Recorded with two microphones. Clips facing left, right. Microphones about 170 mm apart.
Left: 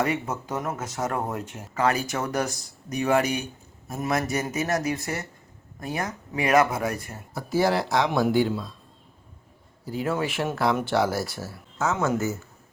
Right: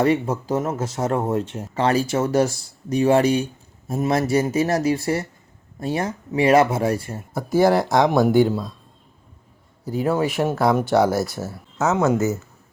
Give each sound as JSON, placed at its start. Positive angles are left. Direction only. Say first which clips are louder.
{"t": 0.0, "sound": "speech", "louder": "right 7 dB", "side_deg": -30}
{"t": 7.3, "sound": "speech", "louder": "right 6 dB", "side_deg": -50}
{"t": 10.0, "sound": "speech", "louder": "right 6 dB", "side_deg": -35}
{"t": 12.0, "sound": "speech", "louder": "right 6 dB", "side_deg": -20}